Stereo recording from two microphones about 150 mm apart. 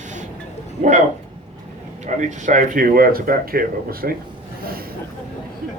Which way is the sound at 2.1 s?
55° right (ahead or behind).